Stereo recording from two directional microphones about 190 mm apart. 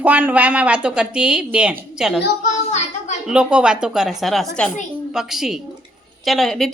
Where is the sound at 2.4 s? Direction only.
40° left (ahead or behind).